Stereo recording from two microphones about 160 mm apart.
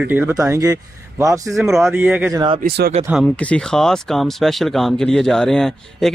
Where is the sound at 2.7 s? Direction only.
75° right (ahead or behind).